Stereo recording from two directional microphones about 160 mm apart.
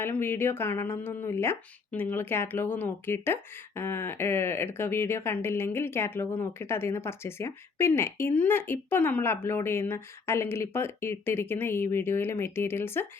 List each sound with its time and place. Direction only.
0.0 s speech: 15° left (ahead or behind)